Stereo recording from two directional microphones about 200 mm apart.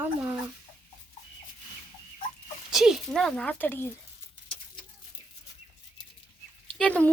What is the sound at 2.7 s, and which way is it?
Speech, centre (ahead or behind).